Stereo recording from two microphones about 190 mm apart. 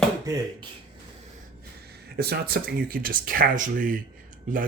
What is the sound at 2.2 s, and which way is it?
Speech, 55° right (ahead or behind).